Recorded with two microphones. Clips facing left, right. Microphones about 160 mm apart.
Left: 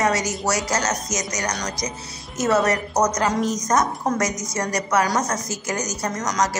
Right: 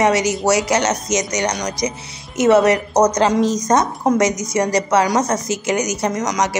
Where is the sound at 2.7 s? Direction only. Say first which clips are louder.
Right 6 dB; 20° right (ahead or behind).